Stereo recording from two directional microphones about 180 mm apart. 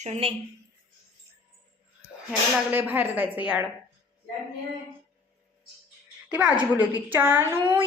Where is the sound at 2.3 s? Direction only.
5° right (ahead or behind).